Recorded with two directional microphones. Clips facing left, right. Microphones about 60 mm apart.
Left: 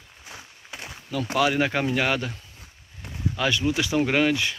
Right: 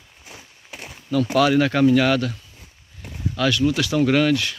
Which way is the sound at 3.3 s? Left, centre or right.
Centre.